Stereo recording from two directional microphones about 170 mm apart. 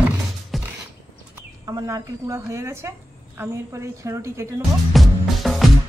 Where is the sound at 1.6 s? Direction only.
20° right (ahead or behind).